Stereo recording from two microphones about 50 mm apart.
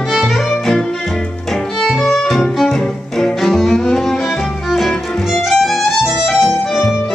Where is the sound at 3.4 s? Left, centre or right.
Centre.